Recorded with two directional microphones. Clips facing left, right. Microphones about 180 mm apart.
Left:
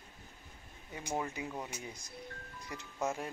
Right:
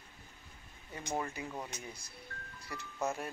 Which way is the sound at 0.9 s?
10° left (ahead or behind).